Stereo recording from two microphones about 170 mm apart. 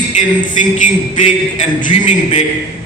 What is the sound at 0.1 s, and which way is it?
A man's voice, 50° left (ahead or behind).